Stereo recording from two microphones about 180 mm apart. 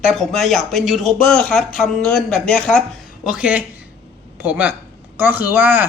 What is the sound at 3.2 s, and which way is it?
Speech, 5° right (ahead or behind).